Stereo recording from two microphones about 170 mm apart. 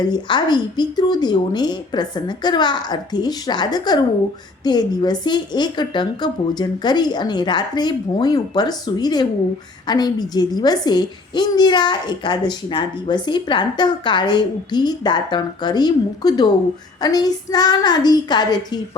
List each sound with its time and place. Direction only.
0.0 s a child's voice: 25° left (ahead or behind)